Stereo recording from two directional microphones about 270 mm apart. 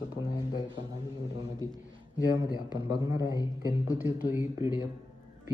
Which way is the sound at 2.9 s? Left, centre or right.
Centre.